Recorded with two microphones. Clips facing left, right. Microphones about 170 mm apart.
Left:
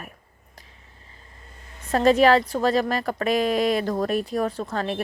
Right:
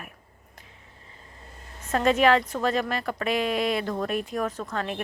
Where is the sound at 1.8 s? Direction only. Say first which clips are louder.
Left 4 dB; 35° left (ahead or behind).